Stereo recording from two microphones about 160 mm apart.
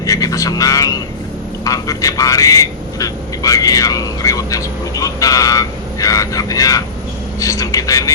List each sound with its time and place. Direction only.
0.0 s speech: 20° left (ahead or behind)